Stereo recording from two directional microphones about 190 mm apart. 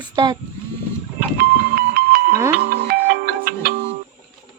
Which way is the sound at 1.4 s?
50° right (ahead or behind).